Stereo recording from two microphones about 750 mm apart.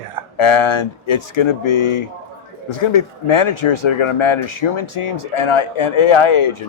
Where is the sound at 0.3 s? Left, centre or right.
Left.